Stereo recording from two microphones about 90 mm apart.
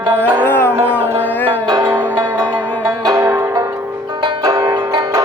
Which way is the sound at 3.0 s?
40° right (ahead or behind).